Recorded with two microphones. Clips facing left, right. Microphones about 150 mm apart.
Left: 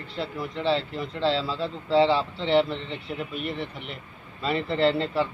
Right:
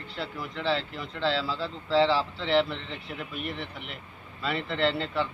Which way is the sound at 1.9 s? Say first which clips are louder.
Left 3 dB; 25° left (ahead or behind).